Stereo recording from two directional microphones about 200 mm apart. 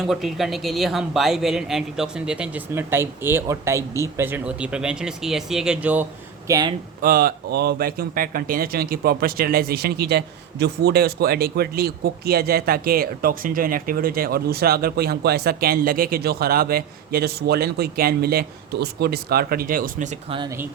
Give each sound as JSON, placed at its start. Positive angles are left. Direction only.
{"t": 0.0, "sound": "speech", "side_deg": 0}
{"t": 6.5, "sound": "speech", "side_deg": -20}
{"t": 7.0, "sound": "speech", "side_deg": -45}
{"t": 20.3, "sound": "speech", "side_deg": -20}